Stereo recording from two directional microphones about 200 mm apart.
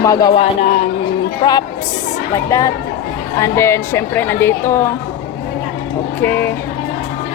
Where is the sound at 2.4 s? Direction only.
15° left (ahead or behind).